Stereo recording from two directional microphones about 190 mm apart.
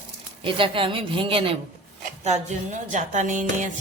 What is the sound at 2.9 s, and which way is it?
Music, 40° right (ahead or behind).